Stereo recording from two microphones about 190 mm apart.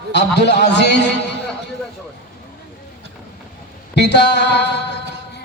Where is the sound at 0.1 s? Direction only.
65° left (ahead or behind).